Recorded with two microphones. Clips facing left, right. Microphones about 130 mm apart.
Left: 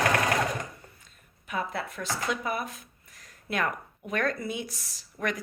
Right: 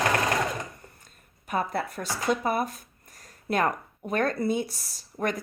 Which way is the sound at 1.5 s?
45° right (ahead or behind).